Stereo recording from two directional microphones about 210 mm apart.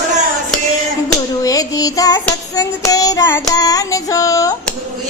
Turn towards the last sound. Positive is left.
turn(degrees=15)  # may be behind; listen again after turning